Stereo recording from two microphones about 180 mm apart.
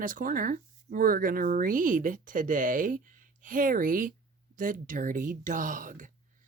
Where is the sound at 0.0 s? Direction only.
50° right (ahead or behind).